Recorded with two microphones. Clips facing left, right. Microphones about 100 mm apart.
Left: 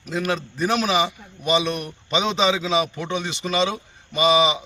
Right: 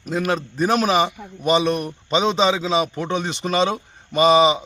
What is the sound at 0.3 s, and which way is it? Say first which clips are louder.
A man's voice: right 3 dB; 40° right (ahead or behind).